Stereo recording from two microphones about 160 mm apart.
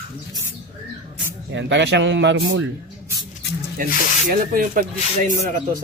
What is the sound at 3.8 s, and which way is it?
Speech, 60° right (ahead or behind).